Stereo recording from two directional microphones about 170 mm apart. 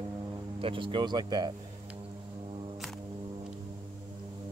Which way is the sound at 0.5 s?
30° right (ahead or behind).